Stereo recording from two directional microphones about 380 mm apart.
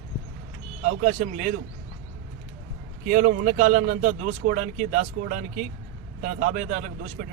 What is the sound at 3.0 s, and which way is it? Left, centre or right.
A man's voice, centre.